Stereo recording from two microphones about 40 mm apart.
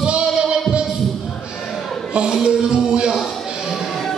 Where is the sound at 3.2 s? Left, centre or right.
Centre.